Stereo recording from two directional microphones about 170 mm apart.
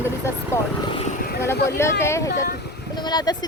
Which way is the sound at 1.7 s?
15° left (ahead or behind).